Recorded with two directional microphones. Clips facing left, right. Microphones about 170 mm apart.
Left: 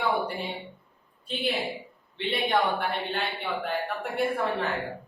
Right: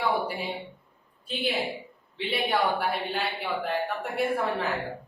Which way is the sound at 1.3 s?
Centre (ahead or behind).